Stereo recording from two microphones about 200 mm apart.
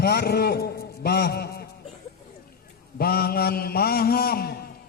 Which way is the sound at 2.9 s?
50° left (ahead or behind).